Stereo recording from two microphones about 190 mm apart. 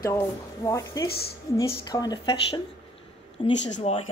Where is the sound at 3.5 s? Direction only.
70° left (ahead or behind).